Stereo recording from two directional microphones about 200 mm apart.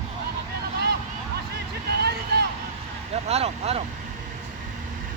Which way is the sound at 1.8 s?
55° right (ahead or behind).